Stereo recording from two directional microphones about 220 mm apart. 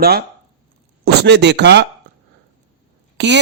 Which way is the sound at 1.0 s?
50° right (ahead or behind).